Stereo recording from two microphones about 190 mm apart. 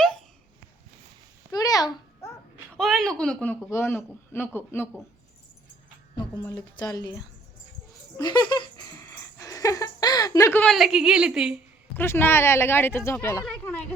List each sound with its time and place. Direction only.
0.0 s hiccup: 5° left (ahead or behind)
1.5 s babbling: 20° left (ahead or behind)
2.7 s a sound: centre (ahead or behind)
3.7 s speech: 15° left (ahead or behind)
6.1 s speech: 20° left (ahead or behind)
8.1 s laughter: 20° left (ahead or behind); by 11.6 s 5° right (ahead or behind)
11.9 s speech: 10° left (ahead or behind)